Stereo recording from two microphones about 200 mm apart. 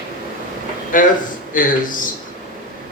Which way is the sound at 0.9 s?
40° left (ahead or behind).